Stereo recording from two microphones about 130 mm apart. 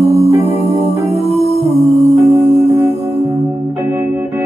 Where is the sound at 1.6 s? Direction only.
60° right (ahead or behind).